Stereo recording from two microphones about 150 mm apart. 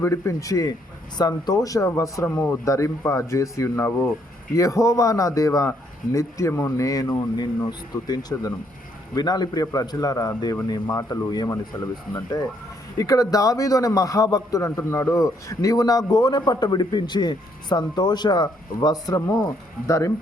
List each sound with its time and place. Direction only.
0.0 s a man's voice: 20° left (ahead or behind)
13.0 s a man's voice: 25° left (ahead or behind)